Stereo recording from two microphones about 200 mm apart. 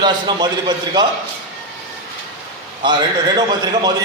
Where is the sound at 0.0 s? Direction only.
20° right (ahead or behind).